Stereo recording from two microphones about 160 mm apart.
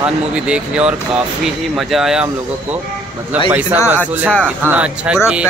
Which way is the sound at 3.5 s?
10° right (ahead or behind).